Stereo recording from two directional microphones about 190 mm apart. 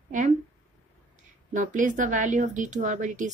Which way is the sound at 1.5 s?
40° right (ahead or behind).